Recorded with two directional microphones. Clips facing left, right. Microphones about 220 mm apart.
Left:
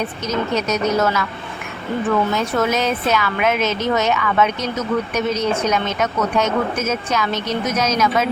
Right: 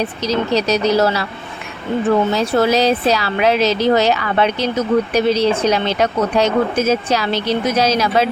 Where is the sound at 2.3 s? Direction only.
35° right (ahead or behind).